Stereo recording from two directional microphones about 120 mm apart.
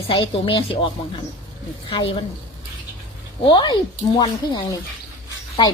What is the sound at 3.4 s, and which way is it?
Speech, 40° left (ahead or behind).